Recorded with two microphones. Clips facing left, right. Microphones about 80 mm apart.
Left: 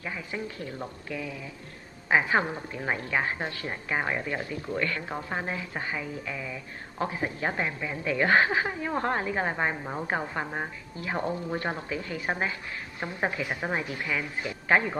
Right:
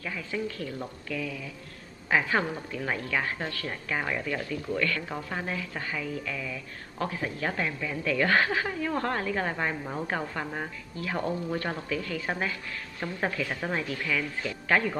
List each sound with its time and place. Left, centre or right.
0.0 s a woman's voice: left